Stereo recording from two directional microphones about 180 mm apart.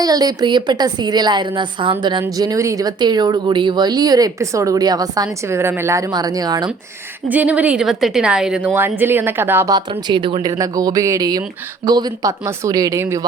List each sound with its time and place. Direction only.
0.0 s speech: 20° right (ahead or behind)
7.3 s a woman's voice: 10° right (ahead or behind)
9.9 s speech: 25° right (ahead or behind)